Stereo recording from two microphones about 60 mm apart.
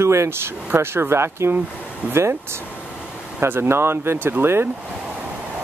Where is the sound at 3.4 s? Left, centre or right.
Right.